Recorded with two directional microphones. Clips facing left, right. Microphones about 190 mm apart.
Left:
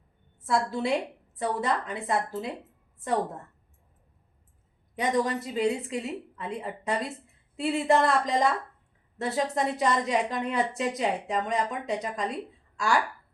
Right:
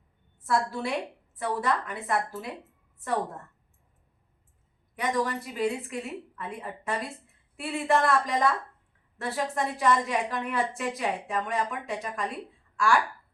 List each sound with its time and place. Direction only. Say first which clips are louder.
0.4 s a woman's voice: left 1 dB; 25° left (ahead or behind)
4.9 s a woman's voice: left 2 dB; 20° left (ahead or behind)